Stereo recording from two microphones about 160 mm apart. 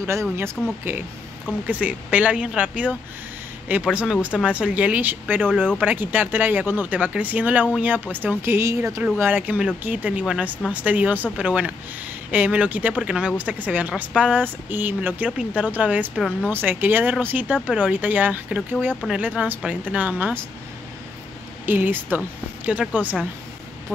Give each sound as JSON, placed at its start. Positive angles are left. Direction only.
{"t": 0.0, "sound": "speech", "side_deg": -15}
{"t": 21.6, "sound": "speech", "side_deg": -10}